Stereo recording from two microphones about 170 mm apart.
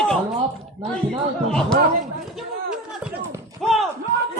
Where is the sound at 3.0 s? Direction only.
5° right (ahead or behind).